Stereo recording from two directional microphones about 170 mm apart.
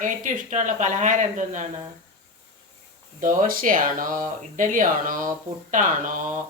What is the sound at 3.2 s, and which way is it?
Speech, 55° right (ahead or behind).